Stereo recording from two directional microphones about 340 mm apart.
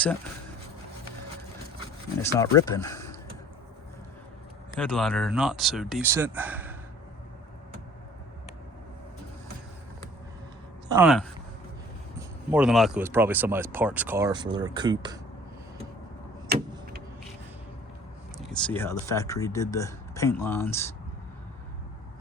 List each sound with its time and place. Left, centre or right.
2.2 s speech: centre
4.8 s speech: centre
10.8 s speech: centre
12.5 s speech: centre
16.5 s vehicle: right
18.5 s speech: centre